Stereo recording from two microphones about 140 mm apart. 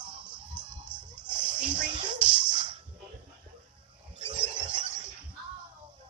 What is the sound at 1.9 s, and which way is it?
Music, 35° right (ahead or behind).